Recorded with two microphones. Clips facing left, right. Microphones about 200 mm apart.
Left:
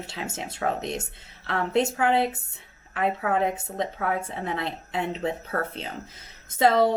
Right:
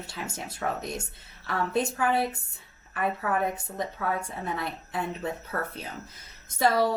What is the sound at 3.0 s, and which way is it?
A woman's voice, 20° left (ahead or behind).